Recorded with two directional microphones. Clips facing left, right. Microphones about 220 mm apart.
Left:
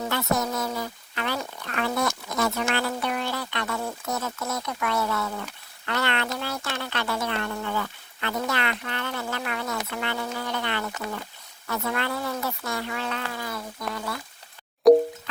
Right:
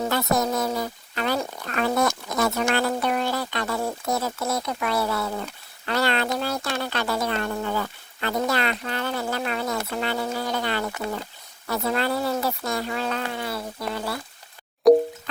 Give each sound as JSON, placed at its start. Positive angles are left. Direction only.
{"t": 0.0, "sound": "speech", "side_deg": -40}
{"t": 14.8, "sound": "plop", "side_deg": 0}